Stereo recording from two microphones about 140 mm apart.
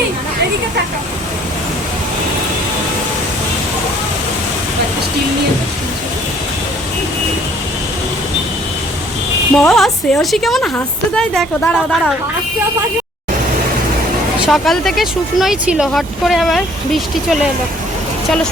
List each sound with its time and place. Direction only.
9.6 s a woman's voice: centre (ahead or behind)
14.4 s speech: centre (ahead or behind)